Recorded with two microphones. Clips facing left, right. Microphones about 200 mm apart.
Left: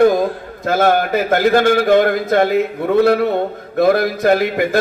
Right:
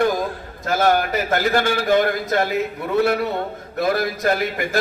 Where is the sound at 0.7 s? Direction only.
55° left (ahead or behind).